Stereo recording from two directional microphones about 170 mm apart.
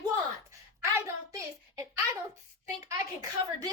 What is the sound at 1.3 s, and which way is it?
A woman's voice, 20° right (ahead or behind).